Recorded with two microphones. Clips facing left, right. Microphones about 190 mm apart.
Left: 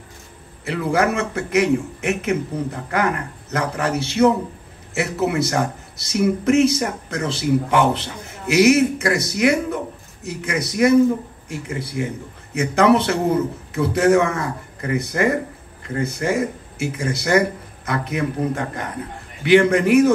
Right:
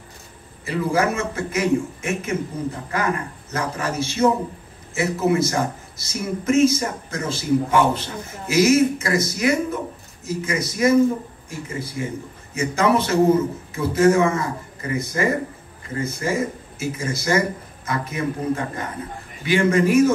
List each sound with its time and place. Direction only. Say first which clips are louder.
0.7 s a man's voice: left 1 dB; 65° left (ahead or behind)